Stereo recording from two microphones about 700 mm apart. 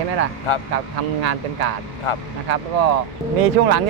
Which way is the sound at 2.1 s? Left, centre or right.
Left.